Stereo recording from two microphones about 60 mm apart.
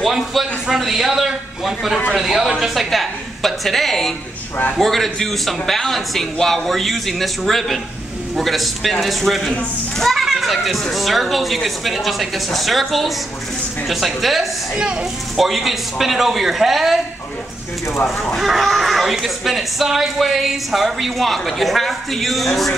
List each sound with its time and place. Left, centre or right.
0.0 s speech: centre
18.2 s speech: centre